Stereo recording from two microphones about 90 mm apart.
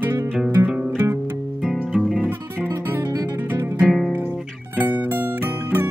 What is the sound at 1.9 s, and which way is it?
Music, centre (ahead or behind).